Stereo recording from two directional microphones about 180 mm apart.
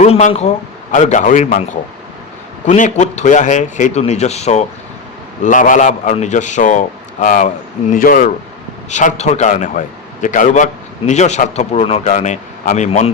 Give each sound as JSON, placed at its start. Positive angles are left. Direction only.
{"t": 0.0, "sound": "a man's voice", "side_deg": 40}